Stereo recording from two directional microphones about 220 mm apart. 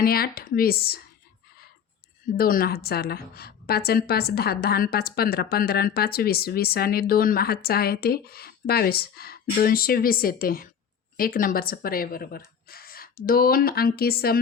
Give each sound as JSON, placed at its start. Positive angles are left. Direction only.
{"t": 0.0, "sound": "a woman's voice", "side_deg": 45}
{"t": 2.3, "sound": "a woman's voice", "side_deg": 40}